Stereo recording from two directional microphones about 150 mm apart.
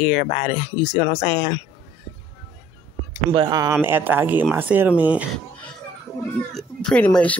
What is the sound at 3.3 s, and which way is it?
Speech, 30° right (ahead or behind).